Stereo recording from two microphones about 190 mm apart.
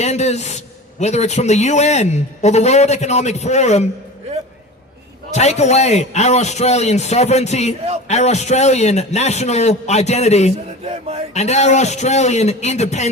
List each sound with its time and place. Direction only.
0.0 s a man's voice: 35° left (ahead or behind)
5.3 s a man's voice: 35° left (ahead or behind)